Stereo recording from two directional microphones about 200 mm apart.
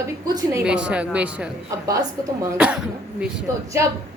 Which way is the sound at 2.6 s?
5° right (ahead or behind).